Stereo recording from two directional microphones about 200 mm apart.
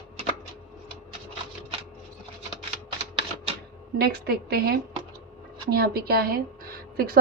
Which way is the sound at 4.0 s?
50° right (ahead or behind).